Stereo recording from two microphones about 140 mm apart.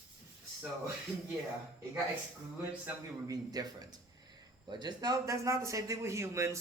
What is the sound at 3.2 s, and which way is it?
Speech, 25° right (ahead or behind).